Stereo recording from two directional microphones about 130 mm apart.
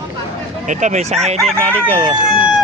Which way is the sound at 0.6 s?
65° right (ahead or behind).